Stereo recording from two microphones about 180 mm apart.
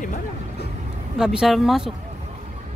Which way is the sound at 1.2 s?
5° right (ahead or behind).